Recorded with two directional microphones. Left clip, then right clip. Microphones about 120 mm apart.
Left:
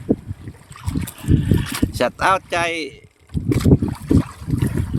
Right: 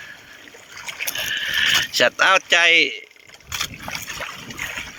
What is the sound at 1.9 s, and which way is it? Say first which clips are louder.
Speech: left 2 dB; 10° left (ahead or behind).